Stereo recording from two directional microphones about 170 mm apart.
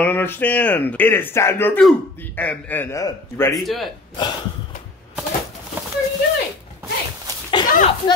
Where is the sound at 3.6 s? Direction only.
Centre (ahead or behind).